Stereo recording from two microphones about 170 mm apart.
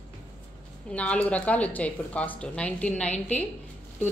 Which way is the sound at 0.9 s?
5° left (ahead or behind).